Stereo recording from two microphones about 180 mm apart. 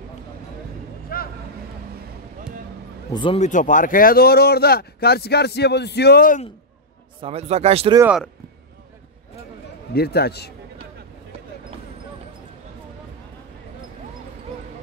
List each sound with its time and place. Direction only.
1.1 s vehicle: 55° left (ahead or behind)
3.1 s speech: 25° left (ahead or behind)
3.3 s speech: 45° left (ahead or behind)
7.2 s speech: 35° right (ahead or behind)
9.9 s speech: 60° left (ahead or behind)